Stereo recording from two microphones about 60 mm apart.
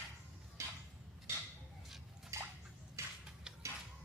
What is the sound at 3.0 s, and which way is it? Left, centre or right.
Tick-tock, right.